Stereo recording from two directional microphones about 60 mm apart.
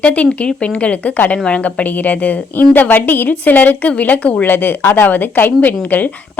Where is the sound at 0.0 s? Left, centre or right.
Left.